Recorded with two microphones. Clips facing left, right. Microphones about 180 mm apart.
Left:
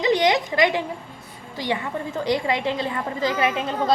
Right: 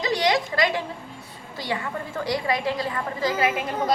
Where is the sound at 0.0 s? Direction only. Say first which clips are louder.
Left 3 dB; 20° left (ahead or behind).